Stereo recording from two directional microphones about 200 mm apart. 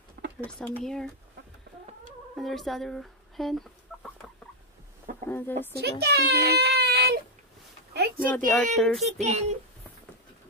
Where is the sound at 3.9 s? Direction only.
5° left (ahead or behind).